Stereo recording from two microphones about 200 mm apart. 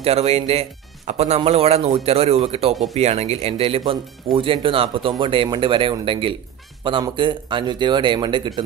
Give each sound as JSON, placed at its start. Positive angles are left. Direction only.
{"t": 0.0, "sound": "speech", "side_deg": -30}